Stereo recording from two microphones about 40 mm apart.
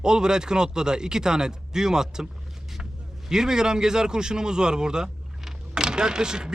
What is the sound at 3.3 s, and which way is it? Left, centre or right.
Speech, centre.